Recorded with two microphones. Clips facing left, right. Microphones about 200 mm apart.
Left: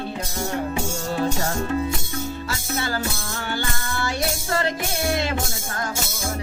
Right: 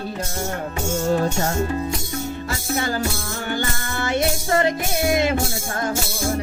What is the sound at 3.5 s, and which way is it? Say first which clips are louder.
Music: right 2 dB; 20° right (ahead or behind).